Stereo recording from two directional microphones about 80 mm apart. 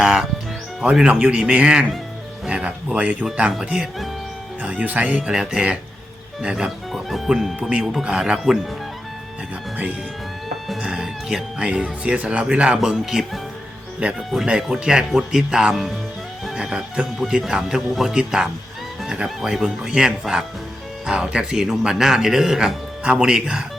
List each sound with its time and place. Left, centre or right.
0.0 s speech: centre
4.6 s speech: centre
10.8 s speech: centre